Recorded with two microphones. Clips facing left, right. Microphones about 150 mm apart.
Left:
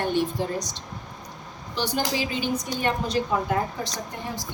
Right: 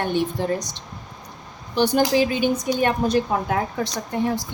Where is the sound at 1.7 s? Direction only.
55° right (ahead or behind).